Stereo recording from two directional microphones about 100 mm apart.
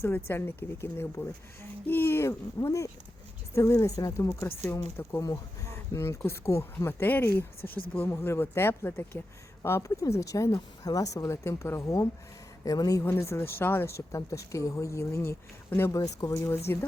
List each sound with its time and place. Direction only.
0.0 s speech: 25° left (ahead or behind)
4.7 s speech: 25° left (ahead or behind)
5.2 s speech: 35° left (ahead or behind)